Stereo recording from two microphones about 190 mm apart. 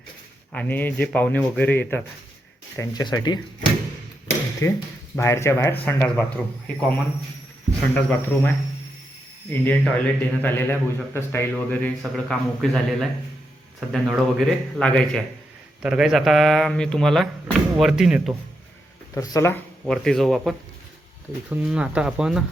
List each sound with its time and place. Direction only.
0.5 s a man's voice: 10° left (ahead or behind)
2.7 s speech: 20° left (ahead or behind)
4.6 s a man's voice: 15° left (ahead or behind); by 18.3 s 5° right (ahead or behind)
19.1 s a man's voice: 15° left (ahead or behind)
19.8 s speech: centre (ahead or behind)